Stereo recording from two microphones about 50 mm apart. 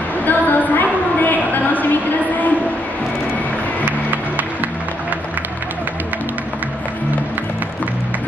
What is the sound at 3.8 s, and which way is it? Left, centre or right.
Music, right.